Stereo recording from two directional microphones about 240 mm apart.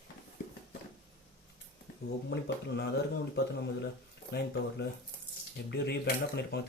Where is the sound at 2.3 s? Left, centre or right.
Left.